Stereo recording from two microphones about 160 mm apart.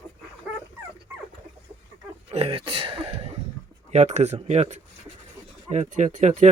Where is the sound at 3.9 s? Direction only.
45° right (ahead or behind).